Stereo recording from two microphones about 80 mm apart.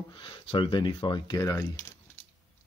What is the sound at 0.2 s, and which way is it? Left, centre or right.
Speech, left.